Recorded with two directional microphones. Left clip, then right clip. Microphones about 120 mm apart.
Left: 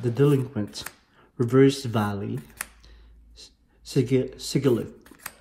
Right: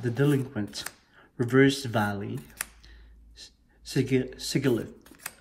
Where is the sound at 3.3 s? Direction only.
45° left (ahead or behind).